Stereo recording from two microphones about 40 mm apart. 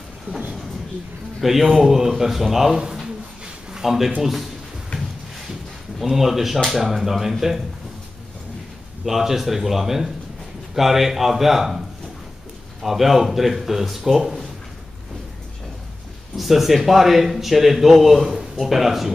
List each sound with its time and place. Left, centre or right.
0.3 s speech: right
1.4 s a man's voice: centre
2.7 s a man's voice: centre
6.0 s a man's voice: centre
9.0 s speech: centre
12.8 s speech: centre
16.3 s a man's voice: centre